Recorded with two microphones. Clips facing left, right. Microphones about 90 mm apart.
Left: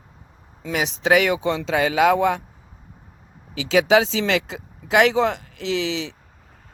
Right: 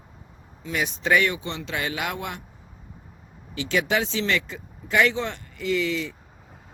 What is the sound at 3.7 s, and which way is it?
Speech, 90° left.